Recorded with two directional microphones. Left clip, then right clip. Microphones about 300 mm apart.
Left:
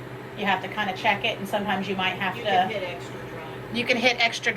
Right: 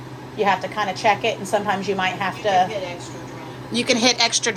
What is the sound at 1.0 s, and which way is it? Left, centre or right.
A woman's voice, right.